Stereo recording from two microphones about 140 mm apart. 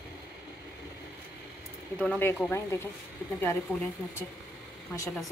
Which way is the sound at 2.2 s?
15° left (ahead or behind).